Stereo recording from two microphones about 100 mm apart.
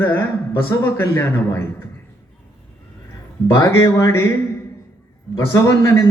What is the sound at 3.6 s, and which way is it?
Speech, 35° left (ahead or behind).